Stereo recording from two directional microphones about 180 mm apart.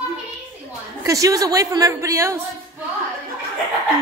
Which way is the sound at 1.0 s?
20° right (ahead or behind).